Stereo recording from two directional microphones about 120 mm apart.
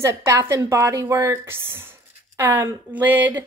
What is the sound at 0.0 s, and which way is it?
A woman's voice, 25° right (ahead or behind).